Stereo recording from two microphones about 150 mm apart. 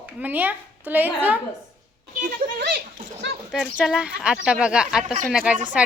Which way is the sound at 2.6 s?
90° right.